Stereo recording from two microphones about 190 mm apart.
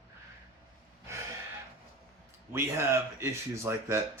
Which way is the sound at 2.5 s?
15° right (ahead or behind).